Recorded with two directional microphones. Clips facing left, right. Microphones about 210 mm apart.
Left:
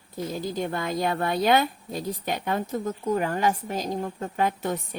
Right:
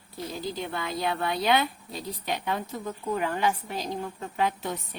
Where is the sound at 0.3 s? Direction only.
45° left (ahead or behind).